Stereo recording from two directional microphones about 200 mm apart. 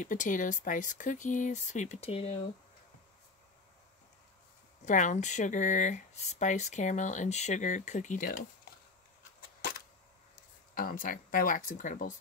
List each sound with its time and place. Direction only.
0.0 s speech: 40° left (ahead or behind)
4.8 s speech: 40° left (ahead or behind)
9.6 s a sound: 50° left (ahead or behind)
10.7 s speech: 45° left (ahead or behind)